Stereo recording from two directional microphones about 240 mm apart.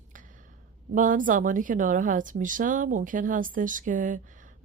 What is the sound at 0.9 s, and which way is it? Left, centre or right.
Speech, right.